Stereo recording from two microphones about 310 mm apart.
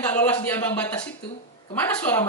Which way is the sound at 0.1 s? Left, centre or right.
Centre.